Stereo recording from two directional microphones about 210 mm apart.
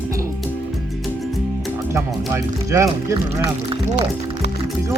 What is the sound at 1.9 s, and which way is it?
Music, 15° right (ahead or behind).